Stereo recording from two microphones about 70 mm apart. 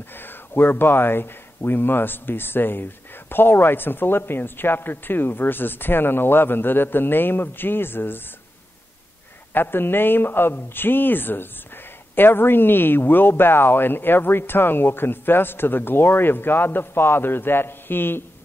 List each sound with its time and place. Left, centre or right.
0.1 s speech: left
9.5 s speech: left